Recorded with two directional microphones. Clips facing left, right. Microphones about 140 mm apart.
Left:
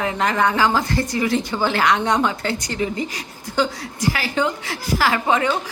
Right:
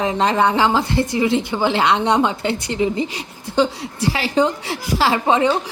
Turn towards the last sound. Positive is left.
turn(degrees=-30)  # may be behind; listen again after turning